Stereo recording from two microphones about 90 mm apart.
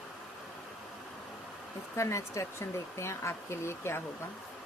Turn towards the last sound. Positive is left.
turn(degrees=30)  # may be behind; listen again after turning